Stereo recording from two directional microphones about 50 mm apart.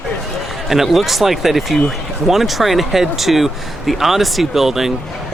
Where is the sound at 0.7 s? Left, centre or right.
Centre.